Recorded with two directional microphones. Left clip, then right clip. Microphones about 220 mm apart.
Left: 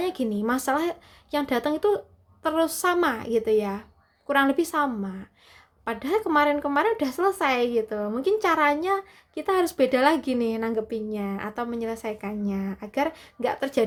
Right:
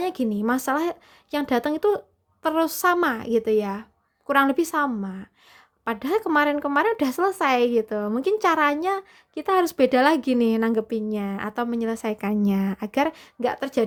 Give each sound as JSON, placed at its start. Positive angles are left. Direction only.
{"t": 0.0, "sound": "speech", "side_deg": -30}